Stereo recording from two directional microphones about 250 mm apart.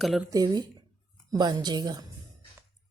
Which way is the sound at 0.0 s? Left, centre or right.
Centre.